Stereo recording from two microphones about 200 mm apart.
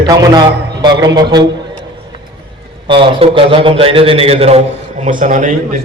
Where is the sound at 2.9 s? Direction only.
25° right (ahead or behind).